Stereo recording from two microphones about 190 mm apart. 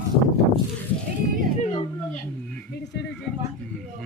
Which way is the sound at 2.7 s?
65° left (ahead or behind).